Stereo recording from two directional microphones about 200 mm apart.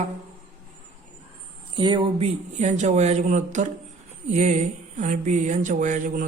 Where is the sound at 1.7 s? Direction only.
25° right (ahead or behind).